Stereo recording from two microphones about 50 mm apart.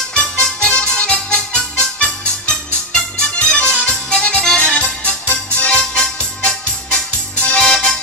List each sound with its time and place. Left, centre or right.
0.1 s music: left